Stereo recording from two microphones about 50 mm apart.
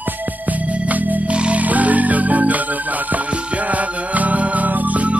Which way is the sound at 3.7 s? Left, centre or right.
Right.